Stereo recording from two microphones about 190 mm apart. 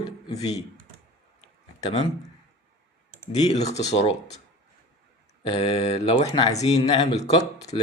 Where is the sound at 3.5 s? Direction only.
35° left (ahead or behind).